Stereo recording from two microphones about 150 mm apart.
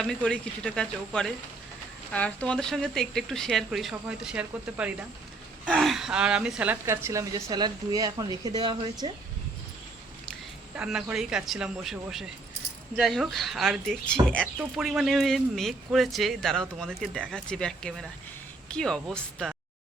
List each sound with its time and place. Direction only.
0.0 s a woman's voice: 5° left (ahead or behind); by 9.0 s 30° right (ahead or behind)
10.8 s speech: 5° right (ahead or behind)
14.4 s speech: 5° right (ahead or behind)